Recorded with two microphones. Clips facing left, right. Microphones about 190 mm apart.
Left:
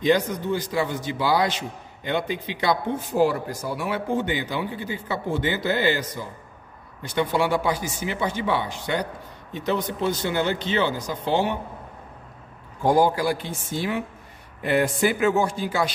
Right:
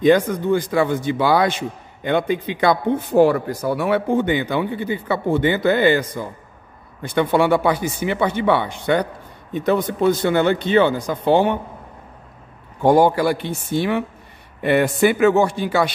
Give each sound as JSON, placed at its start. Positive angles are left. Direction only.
{"t": 0.0, "sound": "speech", "side_deg": -55}
{"t": 12.8, "sound": "a man's voice", "side_deg": -65}